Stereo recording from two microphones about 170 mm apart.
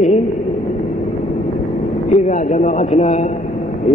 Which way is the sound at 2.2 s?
45° left (ahead or behind).